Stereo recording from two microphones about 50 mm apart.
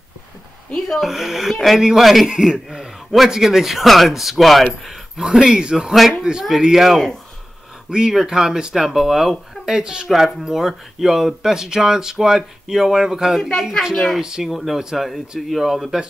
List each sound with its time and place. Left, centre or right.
0.7 s speech: centre
2.2 s a man's voice: centre
6.6 s speech: centre
10.0 s speech: centre
13.4 s a woman's voice: centre
14.2 s speech: centre